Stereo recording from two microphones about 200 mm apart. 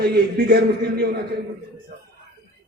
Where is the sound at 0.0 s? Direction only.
55° right (ahead or behind).